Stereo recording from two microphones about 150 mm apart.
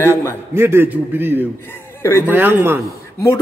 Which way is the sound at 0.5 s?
15° right (ahead or behind).